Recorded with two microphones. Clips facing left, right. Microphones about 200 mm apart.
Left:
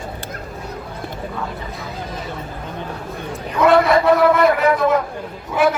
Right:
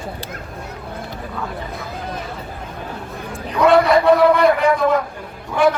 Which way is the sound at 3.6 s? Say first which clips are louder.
Right 1 dB; centre (ahead or behind).